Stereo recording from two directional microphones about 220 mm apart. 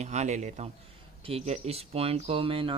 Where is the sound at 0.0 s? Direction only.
30° right (ahead or behind).